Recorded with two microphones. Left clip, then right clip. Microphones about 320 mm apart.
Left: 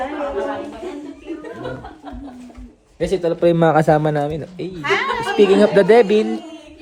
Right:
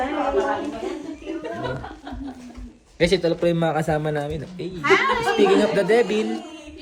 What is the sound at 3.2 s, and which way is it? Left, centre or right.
Speech, left.